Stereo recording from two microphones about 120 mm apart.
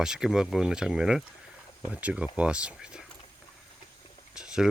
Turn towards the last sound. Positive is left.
turn(degrees=-5)  # may be behind; listen again after turning